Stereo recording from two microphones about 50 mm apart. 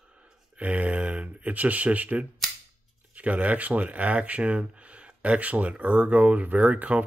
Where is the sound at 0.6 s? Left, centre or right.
Right.